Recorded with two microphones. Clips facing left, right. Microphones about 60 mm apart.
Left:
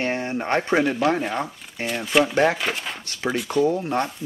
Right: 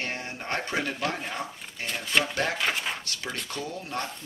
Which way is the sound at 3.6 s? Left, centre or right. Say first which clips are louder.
Left 11 dB; left.